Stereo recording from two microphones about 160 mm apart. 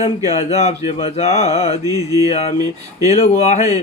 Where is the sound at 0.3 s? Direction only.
40° left (ahead or behind).